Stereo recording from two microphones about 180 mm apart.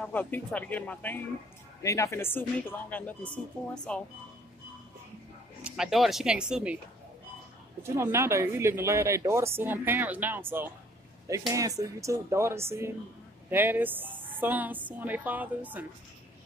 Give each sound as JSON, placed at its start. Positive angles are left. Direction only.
{"t": 0.0, "sound": "speech", "side_deg": 10}
{"t": 5.6, "sound": "speech", "side_deg": 0}
{"t": 7.8, "sound": "speech", "side_deg": -15}